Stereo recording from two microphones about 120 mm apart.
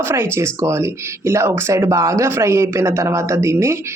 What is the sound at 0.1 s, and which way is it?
Speech, 20° right (ahead or behind).